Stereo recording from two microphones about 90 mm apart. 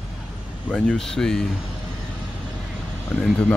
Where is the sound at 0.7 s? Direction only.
5° left (ahead or behind).